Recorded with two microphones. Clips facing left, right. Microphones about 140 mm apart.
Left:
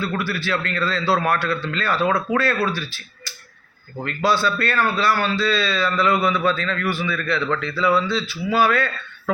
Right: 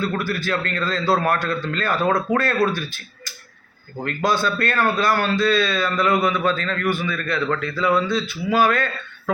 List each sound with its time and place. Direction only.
0.0 s a man's voice: 45° right (ahead or behind)